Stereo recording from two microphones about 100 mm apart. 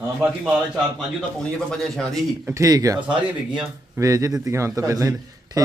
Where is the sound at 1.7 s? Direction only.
5° left (ahead or behind).